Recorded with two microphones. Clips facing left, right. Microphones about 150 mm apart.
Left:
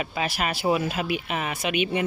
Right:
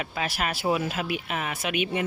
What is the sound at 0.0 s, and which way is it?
Speech, centre (ahead or behind).